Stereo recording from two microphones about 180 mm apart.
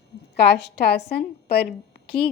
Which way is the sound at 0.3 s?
65° left (ahead or behind).